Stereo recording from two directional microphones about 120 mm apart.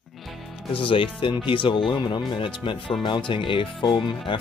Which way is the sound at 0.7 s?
45° left (ahead or behind).